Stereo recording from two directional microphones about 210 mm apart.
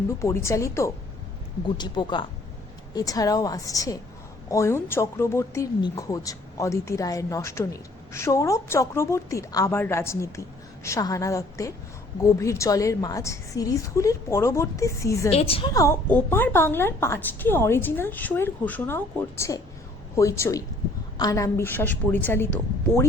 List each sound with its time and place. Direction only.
0.2 s speech: 15° left (ahead or behind)
15.3 s speech: 25° left (ahead or behind); by 22.4 s 10° left (ahead or behind)